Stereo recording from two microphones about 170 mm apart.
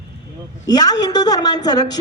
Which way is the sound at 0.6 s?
20° left (ahead or behind).